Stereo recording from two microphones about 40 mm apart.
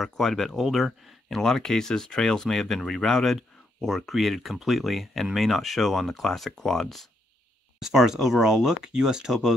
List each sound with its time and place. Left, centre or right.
0.0 s speech: centre
7.8 s speech: centre